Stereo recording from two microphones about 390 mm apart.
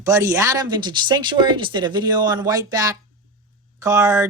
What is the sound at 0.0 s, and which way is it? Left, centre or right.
Speech, centre.